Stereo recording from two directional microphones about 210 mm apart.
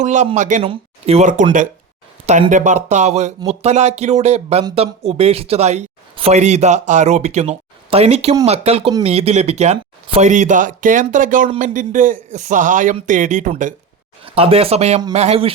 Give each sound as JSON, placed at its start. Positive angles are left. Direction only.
{"t": 0.0, "sound": "speech", "side_deg": -35}
{"t": 14.3, "sound": "speech", "side_deg": -25}